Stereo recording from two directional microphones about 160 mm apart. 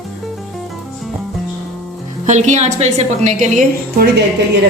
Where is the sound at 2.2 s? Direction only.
50° right (ahead or behind).